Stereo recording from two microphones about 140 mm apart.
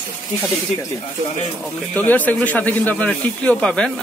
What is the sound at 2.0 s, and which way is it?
Speech, 10° left (ahead or behind).